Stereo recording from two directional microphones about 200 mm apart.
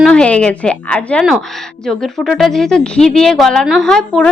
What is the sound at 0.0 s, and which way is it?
A woman's voice, 5° left (ahead or behind).